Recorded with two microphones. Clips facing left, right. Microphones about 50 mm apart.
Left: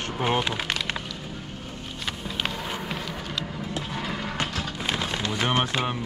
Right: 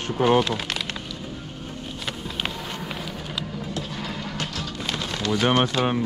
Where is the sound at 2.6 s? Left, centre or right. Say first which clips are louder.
Left 1 dB; centre.